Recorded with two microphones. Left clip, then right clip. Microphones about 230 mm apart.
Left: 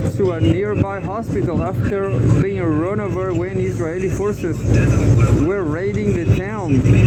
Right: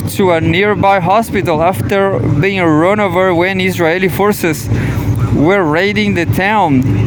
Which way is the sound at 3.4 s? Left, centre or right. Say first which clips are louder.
Right 10 dB; right.